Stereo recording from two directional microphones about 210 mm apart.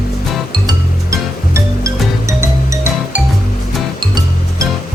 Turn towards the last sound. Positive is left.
turn(degrees=-15)  # may be behind; listen again after turning